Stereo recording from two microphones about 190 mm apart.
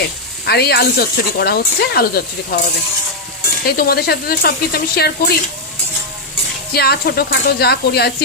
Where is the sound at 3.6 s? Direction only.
55° left (ahead or behind).